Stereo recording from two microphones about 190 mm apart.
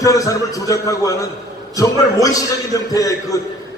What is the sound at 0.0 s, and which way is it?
A man's voice, 15° left (ahead or behind).